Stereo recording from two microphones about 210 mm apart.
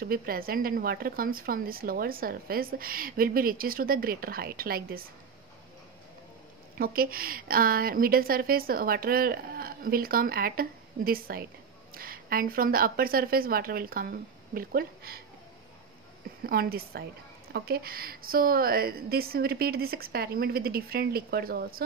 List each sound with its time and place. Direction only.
0.0 s speech: 45° right (ahead or behind)
6.8 s speech: 45° right (ahead or behind)
16.4 s speech: 45° right (ahead or behind)